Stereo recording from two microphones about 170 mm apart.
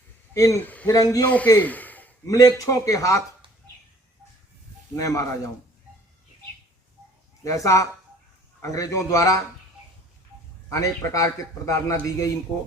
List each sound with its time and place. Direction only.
0.3 s a man's voice: 15° left (ahead or behind)
0.9 s a man's voice: 20° left (ahead or behind)
1.5 s a sound: 10° left (ahead or behind)
2.2 s a man's voice: 20° left (ahead or behind)
4.9 s a man's voice: 20° left (ahead or behind)
7.4 s a man's voice: 20° left (ahead or behind)
10.7 s a man's voice: 20° left (ahead or behind)